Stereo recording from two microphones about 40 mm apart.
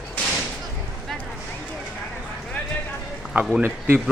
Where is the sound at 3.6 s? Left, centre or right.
Right.